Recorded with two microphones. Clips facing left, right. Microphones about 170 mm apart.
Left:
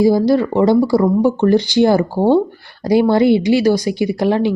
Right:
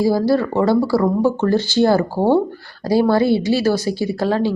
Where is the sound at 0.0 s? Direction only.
20° left (ahead or behind).